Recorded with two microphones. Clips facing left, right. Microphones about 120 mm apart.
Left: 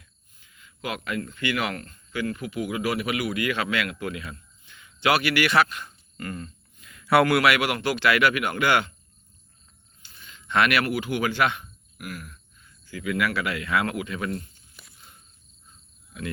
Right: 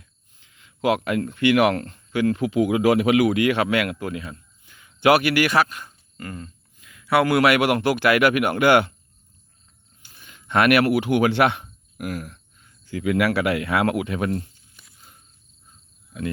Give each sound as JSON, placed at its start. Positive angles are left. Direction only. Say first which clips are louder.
{"t": 0.8, "sound": "speech", "louder": "right 9 dB", "side_deg": -70}
{"t": 3.3, "sound": "speech", "louder": "right 6 dB", "side_deg": -65}
{"t": 4.0, "sound": "speech", "louder": "right 3 dB", "side_deg": -35}
{"t": 5.8, "sound": "a sound", "louder": "even", "side_deg": -20}
{"t": 7.4, "sound": "speech", "louder": "right 5 dB", "side_deg": -50}
{"t": 10.0, "sound": "speech", "louder": "even", "side_deg": -55}
{"t": 11.6, "sound": "a sound", "louder": "right 8 dB", "side_deg": -30}
{"t": 12.8, "sound": "speech", "louder": "right 6 dB", "side_deg": -55}